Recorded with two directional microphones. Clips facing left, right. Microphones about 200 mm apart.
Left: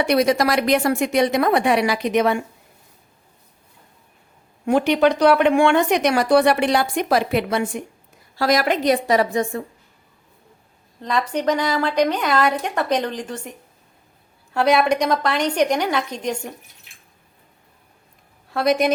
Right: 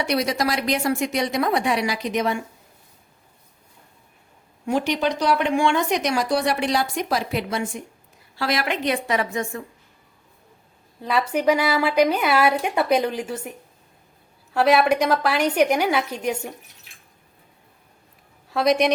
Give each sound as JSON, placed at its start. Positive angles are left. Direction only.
{"t": 0.0, "sound": "speech", "side_deg": 55}
{"t": 4.6, "sound": "speech", "side_deg": 60}
{"t": 8.4, "sound": "a woman's voice", "side_deg": 40}
{"t": 11.0, "sound": "a woman's voice", "side_deg": -5}
{"t": 14.5, "sound": "a woman's voice", "side_deg": 0}
{"t": 18.5, "sound": "a woman's voice", "side_deg": 0}